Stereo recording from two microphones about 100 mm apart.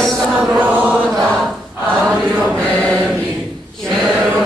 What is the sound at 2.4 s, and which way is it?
Mantra, 5° left (ahead or behind).